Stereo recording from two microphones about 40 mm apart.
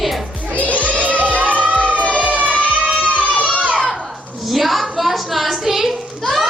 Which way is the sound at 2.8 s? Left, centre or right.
Right.